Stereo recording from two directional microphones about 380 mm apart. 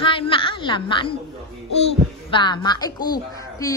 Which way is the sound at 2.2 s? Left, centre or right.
Centre.